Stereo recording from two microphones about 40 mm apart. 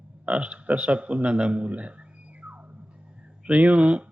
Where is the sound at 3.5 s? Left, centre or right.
Right.